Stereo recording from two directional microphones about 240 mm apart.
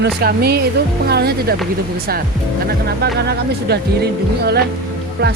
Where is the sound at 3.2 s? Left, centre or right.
Right.